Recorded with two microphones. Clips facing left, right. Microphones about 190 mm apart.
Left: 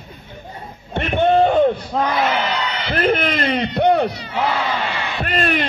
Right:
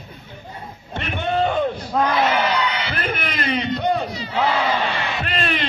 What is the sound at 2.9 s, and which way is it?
A man's voice, 50° left (ahead or behind).